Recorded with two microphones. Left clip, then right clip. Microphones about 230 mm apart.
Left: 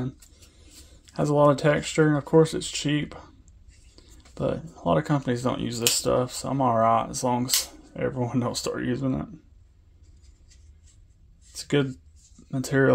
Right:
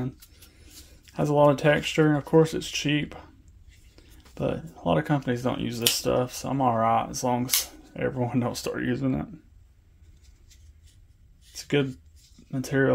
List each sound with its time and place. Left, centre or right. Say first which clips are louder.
0.0 s speech: even; centre
11.5 s speech: left 1 dB; centre